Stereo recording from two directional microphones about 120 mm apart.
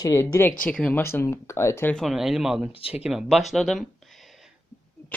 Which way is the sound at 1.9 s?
Centre (ahead or behind).